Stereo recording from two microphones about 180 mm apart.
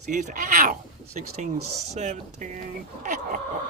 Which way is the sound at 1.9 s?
40° right (ahead or behind).